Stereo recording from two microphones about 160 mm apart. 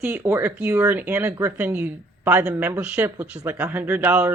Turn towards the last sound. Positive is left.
turn(degrees=-10)  # may be behind; listen again after turning